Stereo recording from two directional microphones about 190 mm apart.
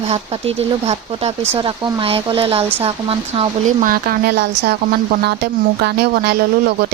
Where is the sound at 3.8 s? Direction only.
50° right (ahead or behind).